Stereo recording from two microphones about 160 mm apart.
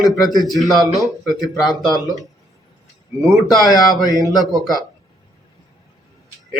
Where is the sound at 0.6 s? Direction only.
20° left (ahead or behind).